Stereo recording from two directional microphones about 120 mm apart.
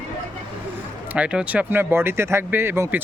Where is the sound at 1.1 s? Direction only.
10° right (ahead or behind).